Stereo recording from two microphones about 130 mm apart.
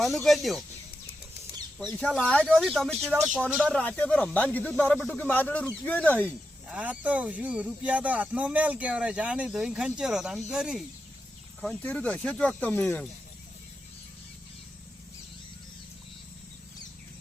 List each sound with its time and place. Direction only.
0.0 s speech: centre (ahead or behind)
2.0 s speech: 5° left (ahead or behind)
6.7 s speech: 10° right (ahead or behind)
11.6 s speech: 10° left (ahead or behind)